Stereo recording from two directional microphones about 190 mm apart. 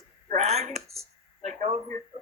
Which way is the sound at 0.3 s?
35° right (ahead or behind).